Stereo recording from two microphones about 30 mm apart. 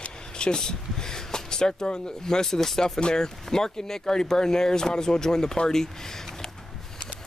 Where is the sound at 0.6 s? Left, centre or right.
Left.